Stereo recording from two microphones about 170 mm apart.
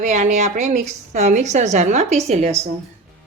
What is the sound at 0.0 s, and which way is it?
A woman's voice, 45° right (ahead or behind).